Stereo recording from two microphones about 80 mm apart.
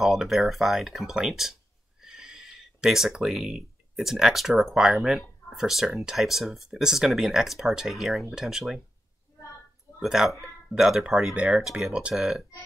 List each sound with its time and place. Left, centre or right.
0.0 s speech: centre
9.9 s speech: centre